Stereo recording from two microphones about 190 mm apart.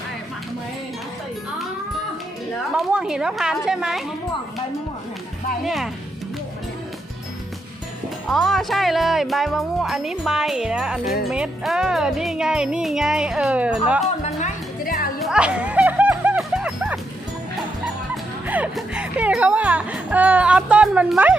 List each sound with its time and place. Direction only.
2.7 s speech: 5° right (ahead or behind)
5.6 s speech: centre (ahead or behind)
8.3 s speech: centre (ahead or behind)
14.4 s music: 50° left (ahead or behind)
15.2 s music: 5° right (ahead or behind)
18.4 s speech: 10° right (ahead or behind)